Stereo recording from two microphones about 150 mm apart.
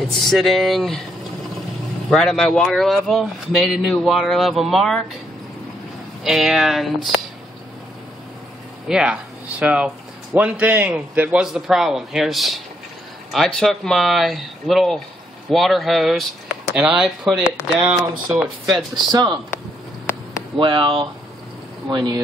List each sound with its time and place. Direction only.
0.2 s speech: centre (ahead or behind)
2.0 s speech: 5° left (ahead or behind)
6.2 s speech: centre (ahead or behind)
8.8 s speech: 5° right (ahead or behind)
19.1 s speech: 30° right (ahead or behind)
20.5 s speech: 35° right (ahead or behind)